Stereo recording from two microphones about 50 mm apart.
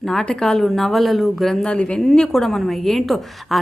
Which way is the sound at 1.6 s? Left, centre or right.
Left.